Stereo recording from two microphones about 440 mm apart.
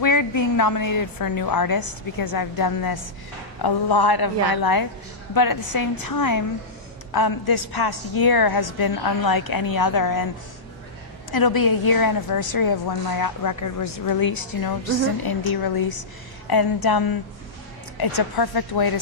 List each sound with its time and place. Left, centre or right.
0.0 s a woman's voice: left
11.3 s a woman's voice: left